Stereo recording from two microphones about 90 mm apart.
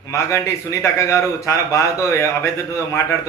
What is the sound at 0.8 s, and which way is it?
Speech, 35° left (ahead or behind).